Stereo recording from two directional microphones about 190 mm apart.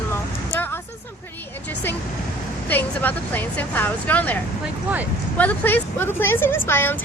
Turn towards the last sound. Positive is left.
turn(degrees=10)  # may be behind; listen again after turning